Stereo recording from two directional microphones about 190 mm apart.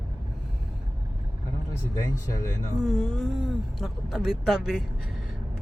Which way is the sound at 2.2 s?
20° left (ahead or behind).